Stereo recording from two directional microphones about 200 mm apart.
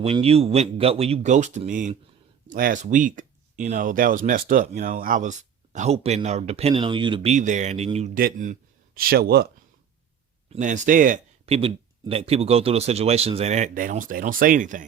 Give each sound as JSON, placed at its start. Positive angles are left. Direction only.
{"t": 0.0, "sound": "speech", "side_deg": -30}
{"t": 10.5, "sound": "speech", "side_deg": -40}
{"t": 11.4, "sound": "speech", "side_deg": -30}